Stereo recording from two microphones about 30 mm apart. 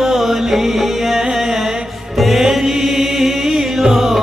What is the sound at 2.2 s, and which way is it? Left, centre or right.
Music, centre.